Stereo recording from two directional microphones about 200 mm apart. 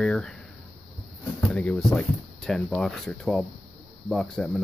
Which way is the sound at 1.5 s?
5° left (ahead or behind).